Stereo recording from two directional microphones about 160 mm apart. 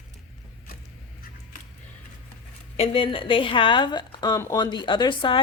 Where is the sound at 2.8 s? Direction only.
35° left (ahead or behind).